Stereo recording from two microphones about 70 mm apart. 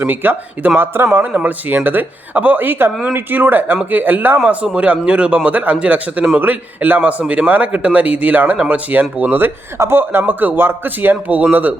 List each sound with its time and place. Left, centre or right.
0.0 s a man's voice: right
1.3 s speech: right
4.4 s a man's voice: centre
8.5 s a man's voice: centre
8.9 s speech: right